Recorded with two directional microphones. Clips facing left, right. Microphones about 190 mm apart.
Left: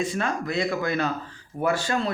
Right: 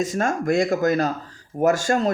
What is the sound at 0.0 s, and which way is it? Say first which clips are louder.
Speech: right 4 dB; 45° right (ahead or behind).